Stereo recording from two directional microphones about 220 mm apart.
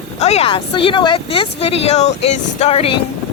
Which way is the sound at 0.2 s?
30° left (ahead or behind).